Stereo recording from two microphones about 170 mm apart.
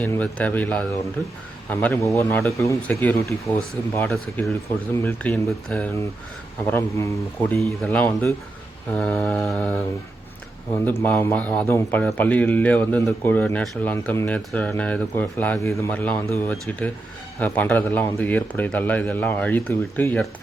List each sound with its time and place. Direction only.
0.0 s speech: 10° left (ahead or behind)
4.1 s a sound: centre (ahead or behind)
5.0 s speech: 5° left (ahead or behind)
7.6 s speech: 5° left (ahead or behind)
9.0 s a sound: 5° left (ahead or behind)
11.0 s speech: 15° left (ahead or behind)